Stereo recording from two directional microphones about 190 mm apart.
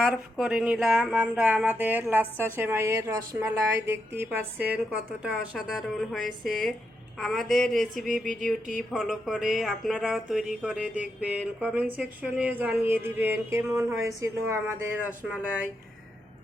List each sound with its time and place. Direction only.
0.0 s a woman's voice: 5° right (ahead or behind)
8.2 s a sound: 45° right (ahead or behind)
8.9 s a woman's voice: centre (ahead or behind)